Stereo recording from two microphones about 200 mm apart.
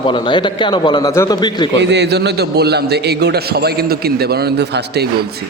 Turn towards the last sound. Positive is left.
turn(degrees=-55)  # may be behind; listen again after turning